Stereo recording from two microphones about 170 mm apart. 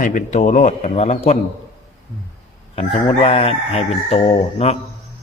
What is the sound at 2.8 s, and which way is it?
A man's voice, 35° left (ahead or behind).